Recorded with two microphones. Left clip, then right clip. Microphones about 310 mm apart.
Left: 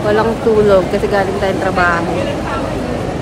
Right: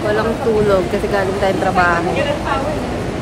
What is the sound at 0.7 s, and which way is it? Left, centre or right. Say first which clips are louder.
Speech: left 4 dB; centre.